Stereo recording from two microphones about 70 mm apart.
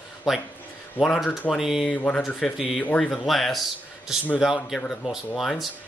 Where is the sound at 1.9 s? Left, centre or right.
Centre.